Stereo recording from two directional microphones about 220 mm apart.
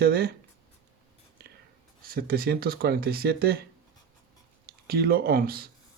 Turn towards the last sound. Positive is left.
turn(degrees=-45)  # may be behind; listen again after turning